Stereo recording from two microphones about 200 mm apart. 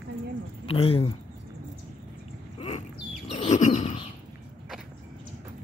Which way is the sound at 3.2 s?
35° left (ahead or behind).